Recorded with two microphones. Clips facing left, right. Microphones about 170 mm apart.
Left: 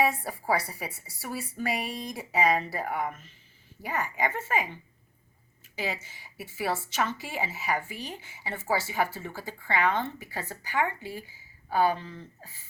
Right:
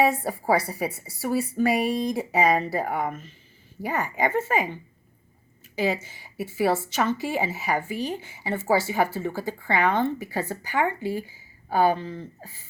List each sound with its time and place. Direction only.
0.0 s a woman's voice: 40° right (ahead or behind)
5.7 s a woman's voice: 40° right (ahead or behind)